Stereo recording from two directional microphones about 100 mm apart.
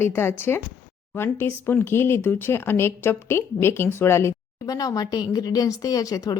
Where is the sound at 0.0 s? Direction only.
25° left (ahead or behind).